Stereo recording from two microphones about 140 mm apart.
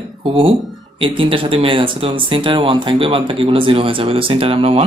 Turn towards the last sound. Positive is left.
turn(degrees=-40)  # may be behind; listen again after turning